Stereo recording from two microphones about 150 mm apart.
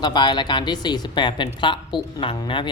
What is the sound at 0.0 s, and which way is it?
A woman's voice, 30° left (ahead or behind).